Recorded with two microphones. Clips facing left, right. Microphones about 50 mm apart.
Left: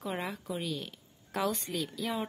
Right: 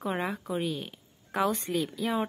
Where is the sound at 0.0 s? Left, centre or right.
Centre.